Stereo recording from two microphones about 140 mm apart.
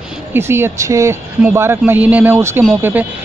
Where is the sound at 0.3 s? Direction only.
15° right (ahead or behind).